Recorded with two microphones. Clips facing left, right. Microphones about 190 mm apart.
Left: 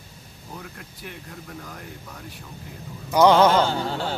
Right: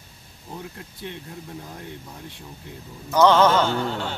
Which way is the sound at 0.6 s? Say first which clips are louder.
Right 5 dB; 25° right (ahead or behind).